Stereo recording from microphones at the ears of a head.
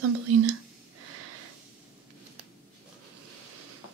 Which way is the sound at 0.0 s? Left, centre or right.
Right.